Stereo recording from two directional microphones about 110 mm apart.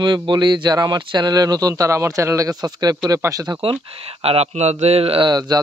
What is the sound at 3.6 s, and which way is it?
Speech, 60° right (ahead or behind).